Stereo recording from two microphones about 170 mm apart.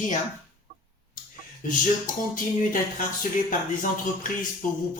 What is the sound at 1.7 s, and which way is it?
Speech, 50° left (ahead or behind).